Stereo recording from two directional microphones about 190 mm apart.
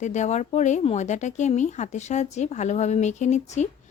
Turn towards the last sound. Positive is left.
turn(degrees=35)  # may be behind; listen again after turning